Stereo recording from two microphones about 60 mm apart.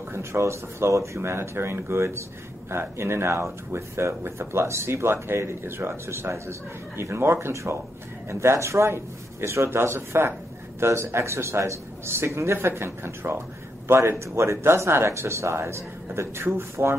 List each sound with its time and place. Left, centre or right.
0.1 s speech: right